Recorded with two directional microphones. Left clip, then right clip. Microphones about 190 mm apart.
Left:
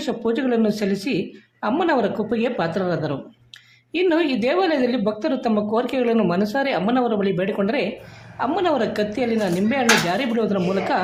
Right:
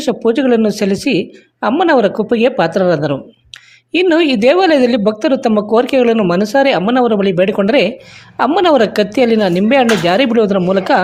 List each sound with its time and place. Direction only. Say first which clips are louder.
0.0 s speech: right 9 dB; 35° right (ahead or behind)